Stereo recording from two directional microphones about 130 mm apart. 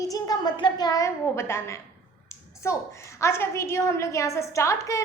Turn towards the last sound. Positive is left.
turn(degrees=25)  # may be behind; listen again after turning